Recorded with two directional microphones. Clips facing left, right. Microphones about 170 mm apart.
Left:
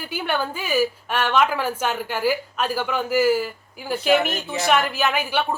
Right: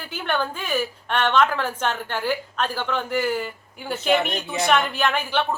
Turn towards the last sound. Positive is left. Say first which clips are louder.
# even
turn(degrees=10)  # may be behind; listen again after turning